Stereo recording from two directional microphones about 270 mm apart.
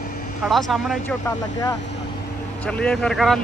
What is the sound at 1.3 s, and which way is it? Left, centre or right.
Speech, centre.